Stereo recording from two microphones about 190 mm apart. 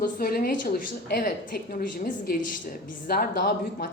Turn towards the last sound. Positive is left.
turn(degrees=55)  # may be behind; listen again after turning